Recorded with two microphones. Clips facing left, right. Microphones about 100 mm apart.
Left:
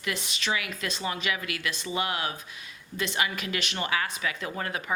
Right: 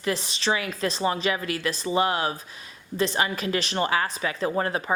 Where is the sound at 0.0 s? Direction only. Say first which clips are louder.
Right 6 dB; 35° right (ahead or behind).